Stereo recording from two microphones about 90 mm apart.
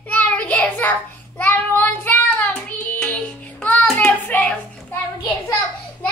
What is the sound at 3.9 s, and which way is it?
Hands, 20° left (ahead or behind).